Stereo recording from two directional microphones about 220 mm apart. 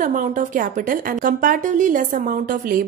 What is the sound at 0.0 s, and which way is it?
A woman's voice, 35° right (ahead or behind).